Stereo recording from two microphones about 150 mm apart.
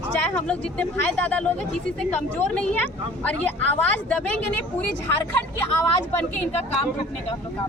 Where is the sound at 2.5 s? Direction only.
10° left (ahead or behind).